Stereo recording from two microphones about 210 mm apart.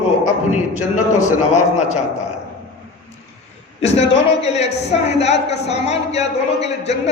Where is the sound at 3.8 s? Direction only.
30° left (ahead or behind).